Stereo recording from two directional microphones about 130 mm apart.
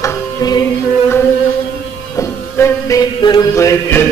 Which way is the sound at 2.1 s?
25° left (ahead or behind).